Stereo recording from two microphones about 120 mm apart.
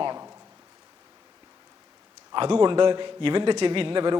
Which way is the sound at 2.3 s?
45° right (ahead or behind).